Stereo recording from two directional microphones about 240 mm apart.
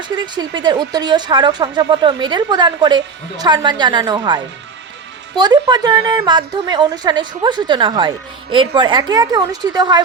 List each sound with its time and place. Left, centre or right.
0.2 s a woman's voice: centre
5.4 s a woman's voice: centre